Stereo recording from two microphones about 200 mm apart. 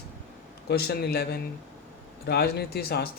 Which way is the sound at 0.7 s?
55° left (ahead or behind).